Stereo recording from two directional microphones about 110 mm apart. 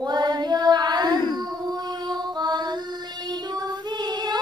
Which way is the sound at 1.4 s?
40° right (ahead or behind).